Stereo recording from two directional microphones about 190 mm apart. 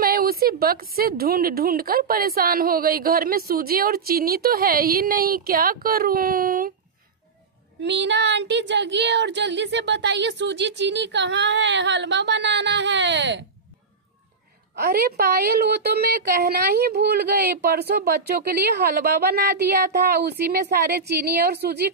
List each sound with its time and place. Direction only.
0.0 s a sound: 50° right (ahead or behind)
0.9 s a woman's voice: 50° right (ahead or behind)
7.8 s speech: 70° right (ahead or behind)
14.8 s a woman's voice: 55° right (ahead or behind)